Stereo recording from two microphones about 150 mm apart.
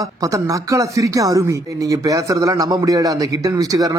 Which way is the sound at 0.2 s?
20° right (ahead or behind).